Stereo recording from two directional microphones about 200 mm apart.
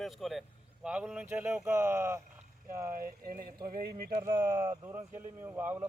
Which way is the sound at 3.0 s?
45° right (ahead or behind).